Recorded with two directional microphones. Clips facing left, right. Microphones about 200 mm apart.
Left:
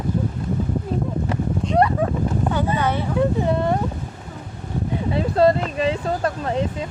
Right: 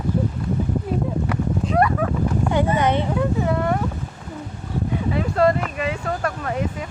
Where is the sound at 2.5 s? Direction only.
15° right (ahead or behind).